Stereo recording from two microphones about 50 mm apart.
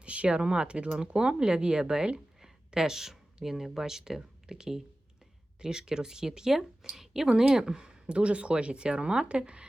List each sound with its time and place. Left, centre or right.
0.0 s speech: right